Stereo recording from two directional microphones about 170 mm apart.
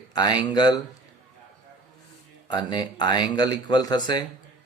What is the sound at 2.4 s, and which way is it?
Speech, 25° left (ahead or behind).